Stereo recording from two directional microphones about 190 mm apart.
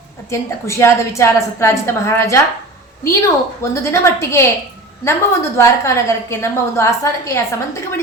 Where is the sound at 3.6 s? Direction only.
15° left (ahead or behind).